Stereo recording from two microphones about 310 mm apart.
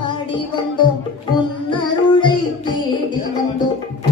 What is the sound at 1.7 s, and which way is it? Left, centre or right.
Music, centre.